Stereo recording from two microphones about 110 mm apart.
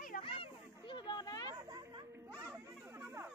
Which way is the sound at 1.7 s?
45° right (ahead or behind).